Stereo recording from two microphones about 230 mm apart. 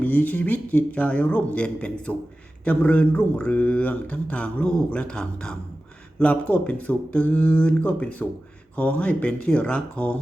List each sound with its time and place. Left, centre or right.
0.0 s speech: centre